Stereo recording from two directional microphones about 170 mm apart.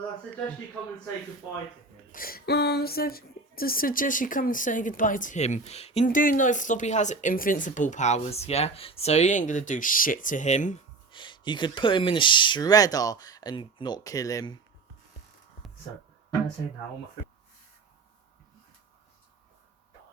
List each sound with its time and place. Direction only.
2.1 s a woman's voice: 60° left (ahead or behind); by 10.8 s 45° left (ahead or behind)
11.1 s speech: 30° left (ahead or behind)